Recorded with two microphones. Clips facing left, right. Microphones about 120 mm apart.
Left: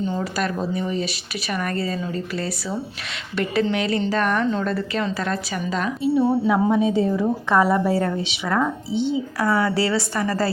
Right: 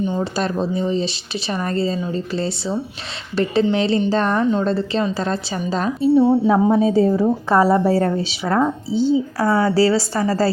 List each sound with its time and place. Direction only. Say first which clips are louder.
0.0 s a woman's voice: right 3 dB; 20° right (ahead or behind)